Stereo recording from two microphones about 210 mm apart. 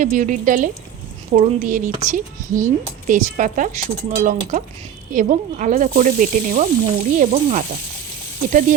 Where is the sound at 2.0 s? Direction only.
15° right (ahead or behind).